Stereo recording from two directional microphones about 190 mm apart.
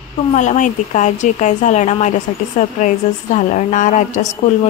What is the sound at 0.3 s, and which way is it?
Speech, 40° left (ahead or behind).